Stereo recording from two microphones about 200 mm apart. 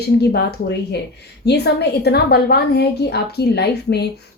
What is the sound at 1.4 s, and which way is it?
A woman's voice, 55° left (ahead or behind).